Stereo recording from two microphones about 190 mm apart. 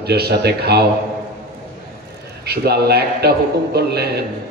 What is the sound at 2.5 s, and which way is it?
A man's voice, 60° right (ahead or behind).